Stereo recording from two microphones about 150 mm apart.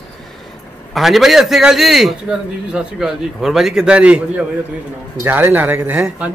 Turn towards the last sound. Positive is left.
turn(degrees=-10)  # may be behind; listen again after turning